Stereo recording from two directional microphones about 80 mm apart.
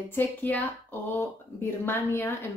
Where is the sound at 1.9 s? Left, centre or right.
Left.